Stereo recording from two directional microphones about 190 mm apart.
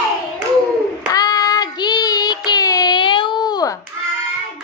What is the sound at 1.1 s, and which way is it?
Child singing, 20° left (ahead or behind).